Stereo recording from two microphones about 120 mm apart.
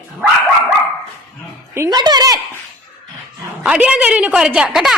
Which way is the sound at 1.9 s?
35° right (ahead or behind).